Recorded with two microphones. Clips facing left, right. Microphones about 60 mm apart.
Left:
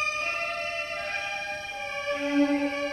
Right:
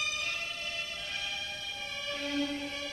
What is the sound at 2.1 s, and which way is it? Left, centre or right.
Music, left.